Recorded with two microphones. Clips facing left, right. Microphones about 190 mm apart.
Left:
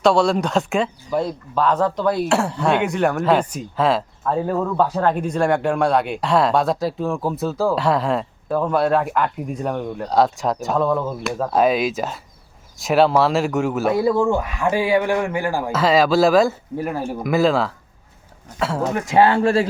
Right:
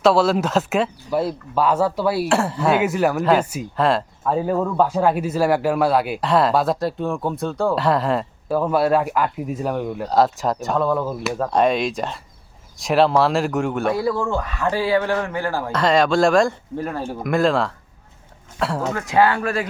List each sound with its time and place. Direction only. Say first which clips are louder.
0.0 s speech: even; 5° right (ahead or behind)
13.9 s a man's voice: left 4 dB; 20° left (ahead or behind)
15.7 s speech: left 1 dB; 5° left (ahead or behind)
19.1 s speech: left 3 dB; 25° left (ahead or behind)